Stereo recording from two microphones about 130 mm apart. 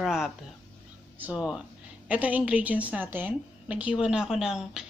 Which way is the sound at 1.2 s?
5° right (ahead or behind).